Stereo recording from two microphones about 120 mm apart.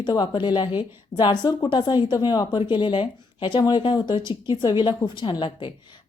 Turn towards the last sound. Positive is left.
turn(degrees=40)  # may be behind; listen again after turning